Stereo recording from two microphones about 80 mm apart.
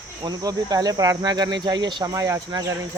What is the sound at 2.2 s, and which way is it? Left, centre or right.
Cricket, right.